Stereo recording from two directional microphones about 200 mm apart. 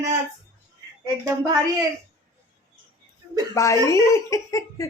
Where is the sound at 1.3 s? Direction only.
20° right (ahead or behind).